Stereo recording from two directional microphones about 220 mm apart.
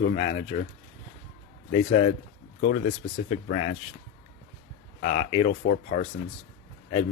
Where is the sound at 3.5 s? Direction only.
35° left (ahead or behind).